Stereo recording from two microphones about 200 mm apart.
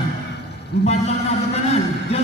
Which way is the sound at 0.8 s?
30° left (ahead or behind).